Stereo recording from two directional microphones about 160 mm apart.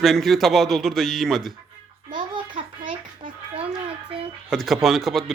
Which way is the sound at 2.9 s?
30° right (ahead or behind).